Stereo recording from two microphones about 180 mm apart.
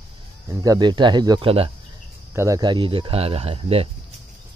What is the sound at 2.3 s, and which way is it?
Speech, 20° right (ahead or behind).